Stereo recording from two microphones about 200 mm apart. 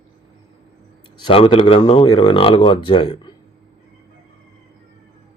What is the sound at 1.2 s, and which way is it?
Speech, 30° left (ahead or behind).